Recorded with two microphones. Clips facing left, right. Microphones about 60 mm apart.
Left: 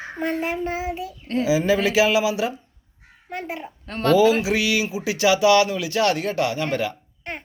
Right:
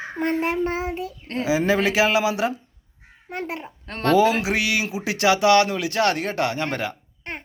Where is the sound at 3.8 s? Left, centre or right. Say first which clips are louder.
Left 1 dB; right.